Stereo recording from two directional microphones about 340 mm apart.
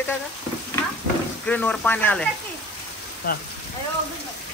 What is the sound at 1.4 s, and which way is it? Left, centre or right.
Speech, centre.